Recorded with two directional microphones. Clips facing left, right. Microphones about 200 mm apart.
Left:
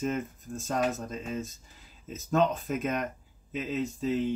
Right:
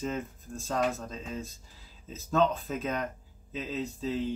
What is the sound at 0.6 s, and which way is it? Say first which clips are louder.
Speech: left 1 dB; 20° left (ahead or behind).